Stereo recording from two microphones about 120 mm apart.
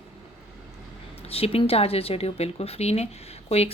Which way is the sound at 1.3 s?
55° left (ahead or behind).